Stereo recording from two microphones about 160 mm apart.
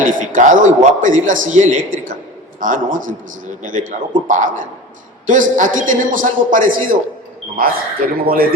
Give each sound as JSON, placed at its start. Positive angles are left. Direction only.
{"t": 0.2, "sound": "a man's voice", "side_deg": -55}